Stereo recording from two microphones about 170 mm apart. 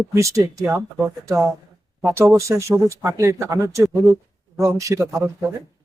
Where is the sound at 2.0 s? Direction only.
15° right (ahead or behind).